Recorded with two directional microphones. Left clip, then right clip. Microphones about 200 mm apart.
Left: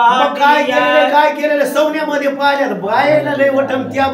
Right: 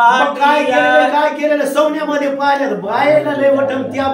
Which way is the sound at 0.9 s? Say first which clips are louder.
Left 1 dB; 20° left (ahead or behind).